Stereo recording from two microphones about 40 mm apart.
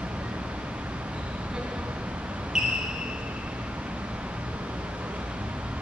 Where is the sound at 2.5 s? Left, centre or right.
Centre.